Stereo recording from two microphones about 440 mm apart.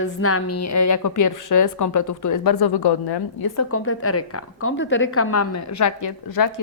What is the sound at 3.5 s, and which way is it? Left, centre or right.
A woman's voice, left.